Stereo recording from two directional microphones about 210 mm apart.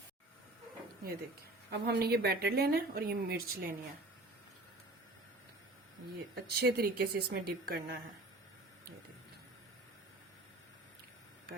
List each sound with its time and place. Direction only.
1.7 s a woman's voice: 50° right (ahead or behind)
6.3 s a woman's voice: 50° right (ahead or behind)